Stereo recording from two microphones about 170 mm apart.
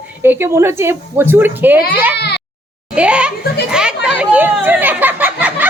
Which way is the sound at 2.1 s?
80° left.